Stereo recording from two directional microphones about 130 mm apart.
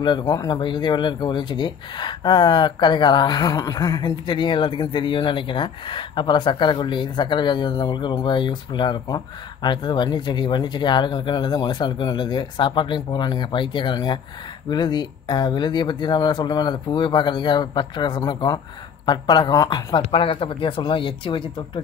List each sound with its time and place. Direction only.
0.0 s speech: 35° left (ahead or behind)
20.0 s speech: 45° left (ahead or behind)